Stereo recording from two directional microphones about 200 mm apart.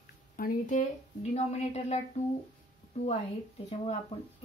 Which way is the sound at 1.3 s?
35° left (ahead or behind).